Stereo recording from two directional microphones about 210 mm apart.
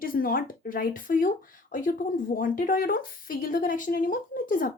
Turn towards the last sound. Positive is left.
turn(degrees=40)  # may be behind; listen again after turning